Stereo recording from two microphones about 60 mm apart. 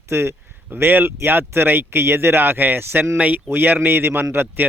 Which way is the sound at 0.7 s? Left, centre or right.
Right.